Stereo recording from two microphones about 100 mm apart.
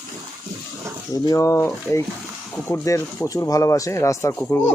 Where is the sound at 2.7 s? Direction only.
30° left (ahead or behind).